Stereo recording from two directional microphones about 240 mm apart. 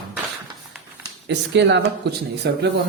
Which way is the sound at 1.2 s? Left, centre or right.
Right.